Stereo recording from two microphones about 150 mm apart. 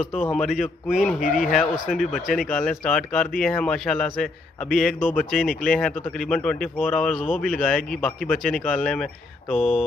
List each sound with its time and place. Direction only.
0.2 s speech: 5° left (ahead or behind)
1.2 s speech: 60° left (ahead or behind)
1.5 s speech: centre (ahead or behind)